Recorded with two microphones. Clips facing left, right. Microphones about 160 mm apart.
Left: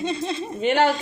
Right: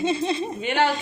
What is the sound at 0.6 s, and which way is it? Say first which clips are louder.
Speech: left 4 dB; 40° left (ahead or behind).